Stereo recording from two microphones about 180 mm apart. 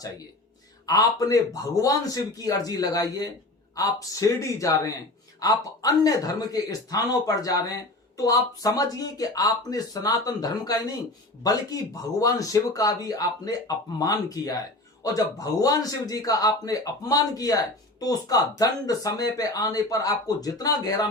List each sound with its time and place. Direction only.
0.9 s a man's voice: 20° left (ahead or behind)
12.2 s a man's voice: 20° left (ahead or behind)